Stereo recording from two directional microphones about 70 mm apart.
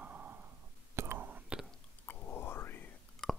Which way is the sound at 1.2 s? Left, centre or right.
Right.